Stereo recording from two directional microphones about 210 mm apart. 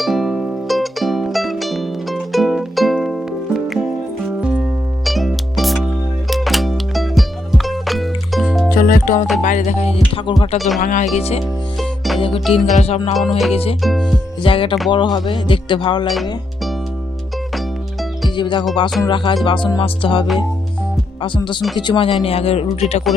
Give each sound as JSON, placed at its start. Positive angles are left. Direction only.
{"t": 0.0, "sound": "music", "side_deg": 0}
{"t": 8.7, "sound": "music", "side_deg": 40}
{"t": 9.4, "sound": "speech", "side_deg": 35}
{"t": 10.8, "sound": "speech", "side_deg": 35}
{"t": 11.8, "sound": "music", "side_deg": 0}
{"t": 12.2, "sound": "speech", "side_deg": 25}
{"t": 13.1, "sound": "music", "side_deg": 0}
{"t": 13.5, "sound": "speech", "side_deg": 25}
{"t": 13.8, "sound": "music", "side_deg": 0}
{"t": 14.4, "sound": "speech", "side_deg": 25}
{"t": 16.0, "sound": "music", "side_deg": 0}
{"t": 18.3, "sound": "speech", "side_deg": 20}